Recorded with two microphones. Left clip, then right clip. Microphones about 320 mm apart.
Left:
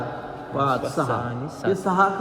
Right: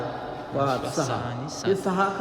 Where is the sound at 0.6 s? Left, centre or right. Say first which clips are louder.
Left 3 dB; centre.